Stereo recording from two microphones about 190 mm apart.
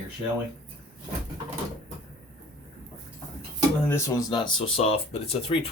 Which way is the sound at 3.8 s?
15° left (ahead or behind).